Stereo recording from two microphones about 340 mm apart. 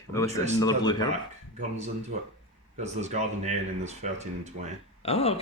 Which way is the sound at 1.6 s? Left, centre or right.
Centre.